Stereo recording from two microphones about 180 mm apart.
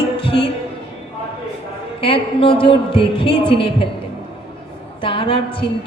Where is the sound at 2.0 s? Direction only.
30° left (ahead or behind).